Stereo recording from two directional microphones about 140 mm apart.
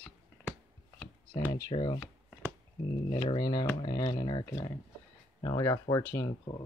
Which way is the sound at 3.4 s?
30° left (ahead or behind).